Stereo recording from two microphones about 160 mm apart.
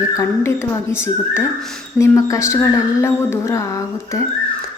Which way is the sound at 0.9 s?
15° left (ahead or behind).